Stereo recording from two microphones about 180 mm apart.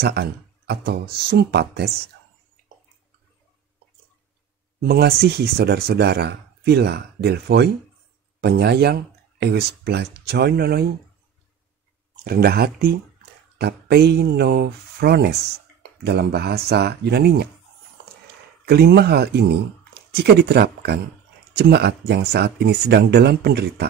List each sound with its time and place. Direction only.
0.0 s speech: 65° right (ahead or behind)
4.8 s speech: 60° right (ahead or behind)
12.3 s speech: 60° right (ahead or behind)
18.2 s a sound: 65° right (ahead or behind)
19.9 s speech: 65° right (ahead or behind)